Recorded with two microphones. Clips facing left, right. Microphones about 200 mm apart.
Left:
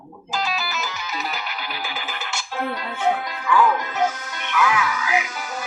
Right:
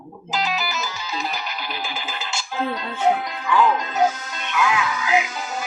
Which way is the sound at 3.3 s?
25° right (ahead or behind).